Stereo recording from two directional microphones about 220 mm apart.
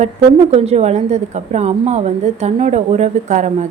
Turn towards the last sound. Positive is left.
turn(degrees=-30)  # may be behind; listen again after turning